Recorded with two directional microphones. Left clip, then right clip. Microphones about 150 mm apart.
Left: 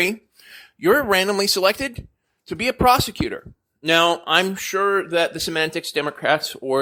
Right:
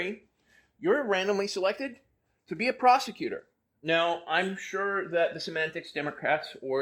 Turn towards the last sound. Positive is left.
turn(degrees=35)  # may be behind; listen again after turning